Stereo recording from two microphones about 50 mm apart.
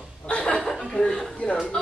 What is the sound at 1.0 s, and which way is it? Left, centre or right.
Speech, centre.